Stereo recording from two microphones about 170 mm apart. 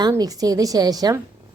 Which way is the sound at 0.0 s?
20° right (ahead or behind).